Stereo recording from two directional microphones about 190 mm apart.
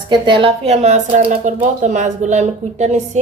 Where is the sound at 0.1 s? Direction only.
25° right (ahead or behind).